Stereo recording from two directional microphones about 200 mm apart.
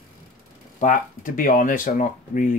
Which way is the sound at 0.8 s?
40° left (ahead or behind).